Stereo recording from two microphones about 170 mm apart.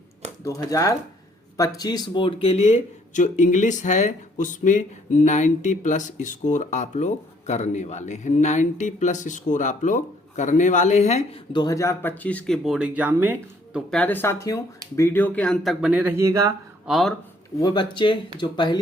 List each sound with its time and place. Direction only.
0.4 s speech: 20° left (ahead or behind); by 11.3 s 40° left (ahead or behind)
11.5 s speech: 20° left (ahead or behind)
12.6 s speech: 5° right (ahead or behind)
13.7 s speech: 5° left (ahead or behind); by 16.6 s 20° right (ahead or behind)
16.8 s speech: centre (ahead or behind)
17.6 s speech: 25° left (ahead or behind)